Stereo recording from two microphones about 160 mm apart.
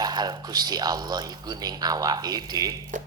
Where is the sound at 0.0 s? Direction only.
25° right (ahead or behind).